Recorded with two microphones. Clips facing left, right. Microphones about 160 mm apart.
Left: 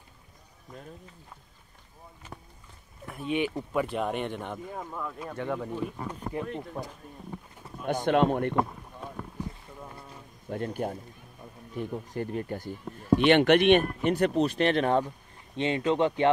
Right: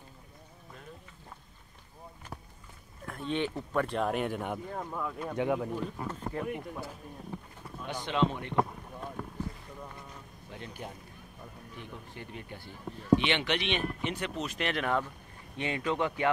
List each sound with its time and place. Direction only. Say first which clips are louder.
2.3 s walk: even; 5° right (ahead or behind)
3.1 s speech: left 3 dB; 10° left (ahead or behind); by 5.7 s 10° right (ahead or behind)
5.7 s speech: left 2 dB; 10° left (ahead or behind)
7.8 s speech: left 6 dB; 50° left (ahead or behind)
10.5 s speech: left 12 dB; 50° left (ahead or behind)
14.1 s speech: left 11 dB; 35° left (ahead or behind)